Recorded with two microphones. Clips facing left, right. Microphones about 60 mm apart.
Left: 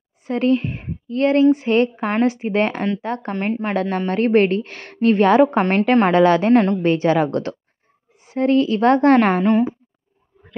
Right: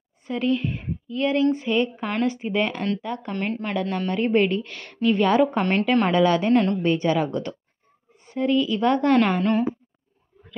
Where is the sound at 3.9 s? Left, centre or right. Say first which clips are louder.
Left 5 dB; left.